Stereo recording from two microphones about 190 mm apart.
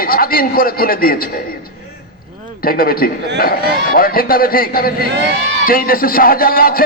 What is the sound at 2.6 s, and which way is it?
A man's voice, 50° left (ahead or behind).